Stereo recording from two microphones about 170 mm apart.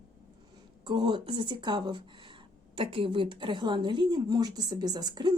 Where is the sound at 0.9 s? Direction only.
25° right (ahead or behind).